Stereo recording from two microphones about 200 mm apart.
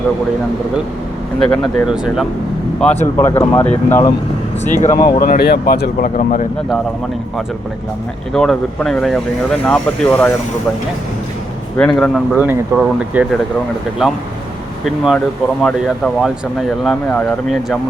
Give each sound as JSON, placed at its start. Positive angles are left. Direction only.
{"t": 1.4, "sound": "speech", "side_deg": 0}
{"t": 2.8, "sound": "speech", "side_deg": 10}
{"t": 4.6, "sound": "speech", "side_deg": 35}
{"t": 4.9, "sound": "speech", "side_deg": 20}
{"t": 5.2, "sound": "speech", "side_deg": 50}
{"t": 8.3, "sound": "speech", "side_deg": 0}
{"t": 11.8, "sound": "speech", "side_deg": 5}
{"t": 16.2, "sound": "speech", "side_deg": 0}